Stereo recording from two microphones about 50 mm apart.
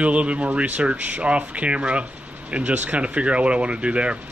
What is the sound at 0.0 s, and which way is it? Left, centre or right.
Speech, right.